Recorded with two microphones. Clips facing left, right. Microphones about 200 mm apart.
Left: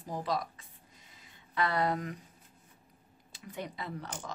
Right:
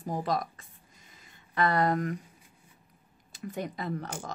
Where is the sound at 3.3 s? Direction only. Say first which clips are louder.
Right 6 dB; 45° right (ahead or behind).